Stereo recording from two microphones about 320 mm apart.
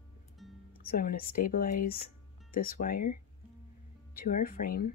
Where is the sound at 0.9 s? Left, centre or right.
Left.